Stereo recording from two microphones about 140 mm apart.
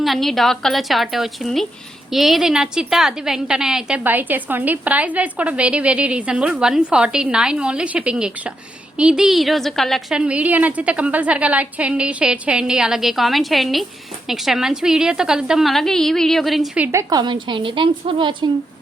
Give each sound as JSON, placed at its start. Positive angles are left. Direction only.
{"t": 0.0, "sound": "a woman's voice", "side_deg": 0}
{"t": 16.8, "sound": "a woman's voice", "side_deg": -20}